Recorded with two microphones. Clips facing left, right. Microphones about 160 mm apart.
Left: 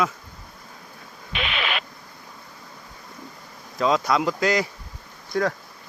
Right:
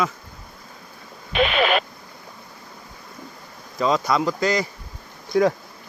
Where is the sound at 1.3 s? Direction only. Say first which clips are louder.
Right 9 dB; 40° right (ahead or behind).